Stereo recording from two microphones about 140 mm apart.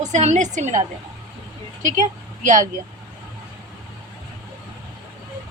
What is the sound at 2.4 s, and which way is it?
Speech, 65° right (ahead or behind).